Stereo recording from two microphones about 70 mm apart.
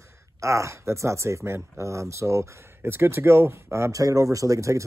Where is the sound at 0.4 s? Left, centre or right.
Right.